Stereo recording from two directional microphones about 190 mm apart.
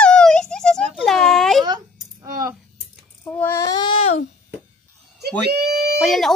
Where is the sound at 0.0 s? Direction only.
5° left (ahead or behind).